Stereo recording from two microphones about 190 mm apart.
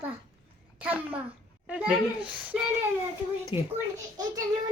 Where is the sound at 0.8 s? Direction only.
5° right (ahead or behind).